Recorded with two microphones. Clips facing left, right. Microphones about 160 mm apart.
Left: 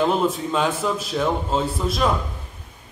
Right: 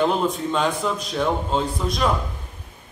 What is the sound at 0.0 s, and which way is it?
Speech, centre (ahead or behind).